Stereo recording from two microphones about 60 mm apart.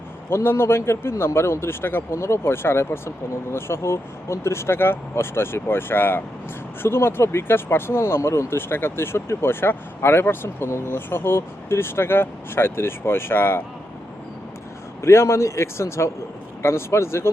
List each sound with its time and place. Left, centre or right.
0.3 s speech: left
2.1 s speech: left
15.0 s speech: left